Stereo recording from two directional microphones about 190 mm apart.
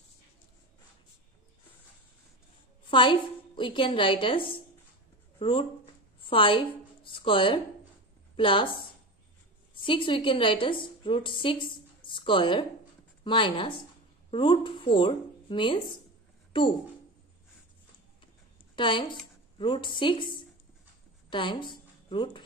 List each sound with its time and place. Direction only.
2.9 s a woman's voice: 25° left (ahead or behind)
9.8 s a woman's voice: 25° left (ahead or behind)
18.8 s a woman's voice: 25° left (ahead or behind)
21.3 s a woman's voice: 25° left (ahead or behind)